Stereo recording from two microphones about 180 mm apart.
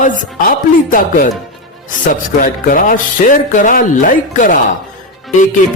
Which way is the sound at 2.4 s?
50° left (ahead or behind).